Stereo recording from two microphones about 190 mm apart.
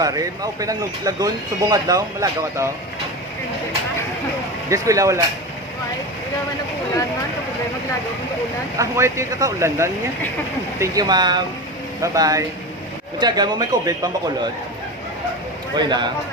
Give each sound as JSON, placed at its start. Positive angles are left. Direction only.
{"t": 0.0, "sound": "speech", "side_deg": -20}
{"t": 4.7, "sound": "speech", "side_deg": -15}
{"t": 8.8, "sound": "speech", "side_deg": -15}
{"t": 15.7, "sound": "speech", "side_deg": -20}